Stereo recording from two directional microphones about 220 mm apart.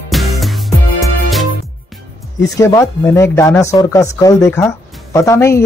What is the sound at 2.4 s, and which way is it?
Speech, 15° left (ahead or behind).